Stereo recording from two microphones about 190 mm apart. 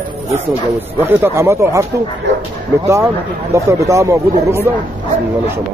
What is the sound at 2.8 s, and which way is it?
A man's voice, 15° right (ahead or behind).